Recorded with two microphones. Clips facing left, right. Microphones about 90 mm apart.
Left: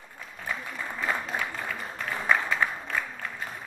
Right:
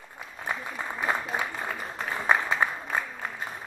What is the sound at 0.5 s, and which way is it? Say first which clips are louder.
Applause: right 2 dB; 25° right (ahead or behind).